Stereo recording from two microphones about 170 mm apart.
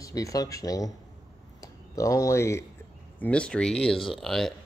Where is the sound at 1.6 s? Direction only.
20° left (ahead or behind).